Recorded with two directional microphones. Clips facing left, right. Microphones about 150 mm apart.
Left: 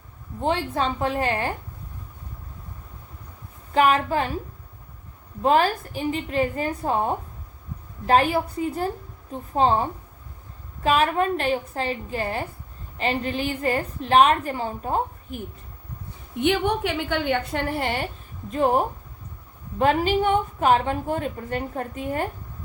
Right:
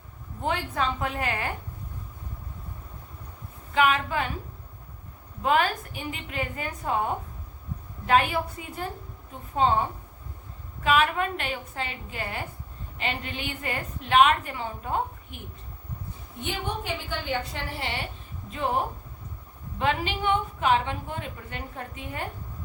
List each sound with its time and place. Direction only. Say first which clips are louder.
0.4 s a woman's voice: left 4 dB; 30° left (ahead or behind)
3.8 s a woman's voice: left 4 dB; 35° left (ahead or behind)
5.4 s a woman's voice: left 4 dB; 35° left (ahead or behind)
10.8 s a woman's voice: left 3 dB; 35° left (ahead or behind)
16.4 s a woman's voice: left 10 dB; 70° left (ahead or behind); by 18.8 s 45° left (ahead or behind)
19.8 s a woman's voice: left 7 dB; 45° left (ahead or behind)